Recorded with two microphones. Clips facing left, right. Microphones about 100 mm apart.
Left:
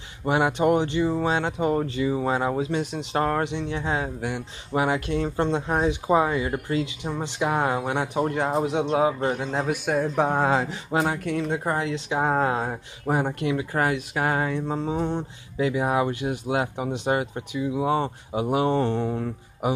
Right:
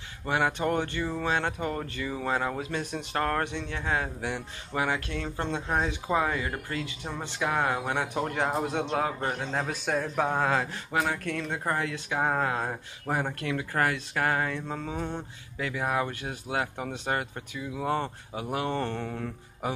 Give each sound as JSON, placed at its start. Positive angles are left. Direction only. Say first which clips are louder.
{"t": 0.2, "sound": "speech", "louder": "left 6 dB", "side_deg": 20}
{"t": 4.7, "sound": "speech", "louder": "left 6 dB", "side_deg": 20}